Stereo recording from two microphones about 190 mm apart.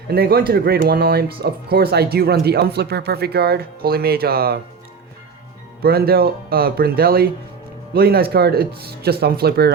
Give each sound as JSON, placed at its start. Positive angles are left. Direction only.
{"t": 0.1, "sound": "speech", "side_deg": -55}
{"t": 5.8, "sound": "speech", "side_deg": -55}